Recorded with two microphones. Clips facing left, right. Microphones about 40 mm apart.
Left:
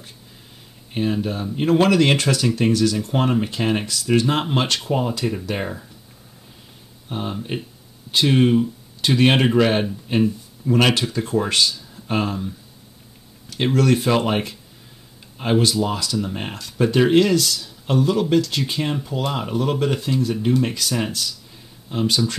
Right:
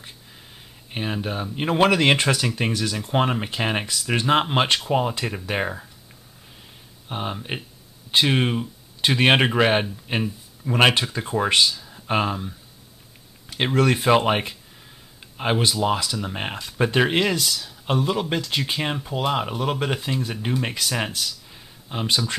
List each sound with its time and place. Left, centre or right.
0.9 s speech: right
7.1 s speech: right
13.7 s speech: right